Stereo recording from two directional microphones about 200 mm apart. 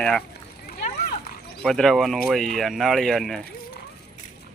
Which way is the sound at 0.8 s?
45° left (ahead or behind).